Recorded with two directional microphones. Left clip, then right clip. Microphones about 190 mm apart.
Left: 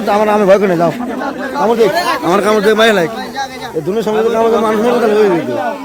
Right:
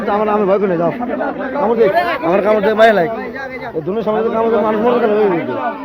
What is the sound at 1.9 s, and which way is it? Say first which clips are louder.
Speech: left 1 dB; 40° left (ahead or behind).